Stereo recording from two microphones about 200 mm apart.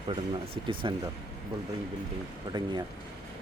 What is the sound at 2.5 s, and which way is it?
Speech, 20° right (ahead or behind).